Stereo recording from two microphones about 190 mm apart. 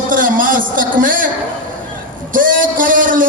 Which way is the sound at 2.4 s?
45° right (ahead or behind).